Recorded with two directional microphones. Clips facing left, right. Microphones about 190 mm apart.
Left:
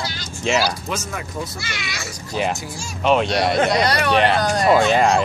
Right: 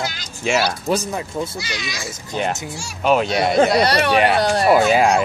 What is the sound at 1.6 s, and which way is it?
Speech, 15° right (ahead or behind).